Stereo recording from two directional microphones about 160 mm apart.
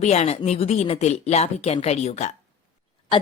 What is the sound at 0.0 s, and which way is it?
Speech, 40° left (ahead or behind).